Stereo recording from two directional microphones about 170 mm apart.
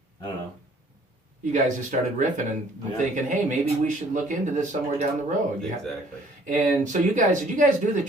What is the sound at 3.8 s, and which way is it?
Speech, 45° right (ahead or behind).